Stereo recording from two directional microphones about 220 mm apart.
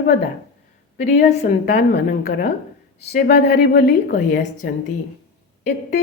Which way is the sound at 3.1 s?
45° left (ahead or behind).